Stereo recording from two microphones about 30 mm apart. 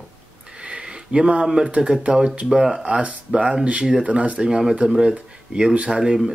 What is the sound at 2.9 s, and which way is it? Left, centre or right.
Speech, right.